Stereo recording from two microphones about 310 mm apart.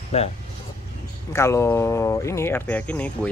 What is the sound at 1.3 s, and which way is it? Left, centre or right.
Speech, centre.